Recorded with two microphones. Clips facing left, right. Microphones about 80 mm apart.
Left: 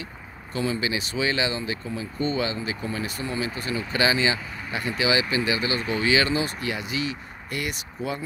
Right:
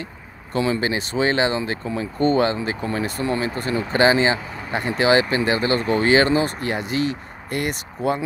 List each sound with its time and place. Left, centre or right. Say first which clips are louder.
0.7 s speech: right 5 dB; right